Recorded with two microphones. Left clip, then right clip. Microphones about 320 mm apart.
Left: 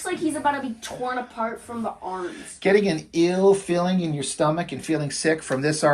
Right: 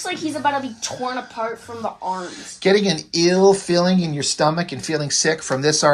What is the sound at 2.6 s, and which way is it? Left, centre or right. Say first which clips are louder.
Speech: right 3 dB; centre.